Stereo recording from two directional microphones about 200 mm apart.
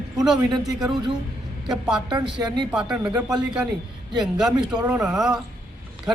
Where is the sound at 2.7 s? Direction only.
5° right (ahead or behind).